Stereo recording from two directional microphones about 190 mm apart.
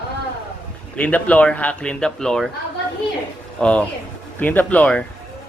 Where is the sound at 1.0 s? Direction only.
5° left (ahead or behind).